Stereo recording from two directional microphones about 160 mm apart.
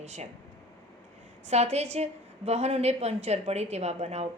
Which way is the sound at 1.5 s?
45° right (ahead or behind).